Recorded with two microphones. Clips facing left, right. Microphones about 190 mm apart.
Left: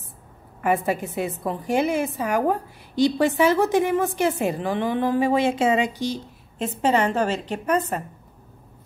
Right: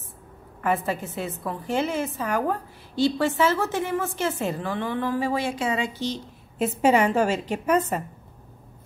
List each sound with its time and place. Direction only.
0.6 s a woman's voice: 15° left (ahead or behind)
6.8 s a woman's voice: 10° right (ahead or behind)